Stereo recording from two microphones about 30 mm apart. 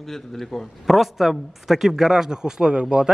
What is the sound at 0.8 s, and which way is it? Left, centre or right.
A man's voice, centre.